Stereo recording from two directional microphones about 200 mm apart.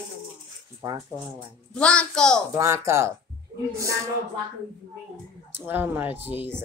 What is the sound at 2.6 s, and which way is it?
Speech, 15° right (ahead or behind).